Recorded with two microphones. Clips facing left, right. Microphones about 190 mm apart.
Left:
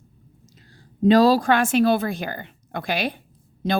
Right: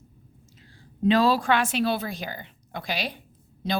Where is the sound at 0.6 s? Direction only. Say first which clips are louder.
Left 5 dB; 40° left (ahead or behind).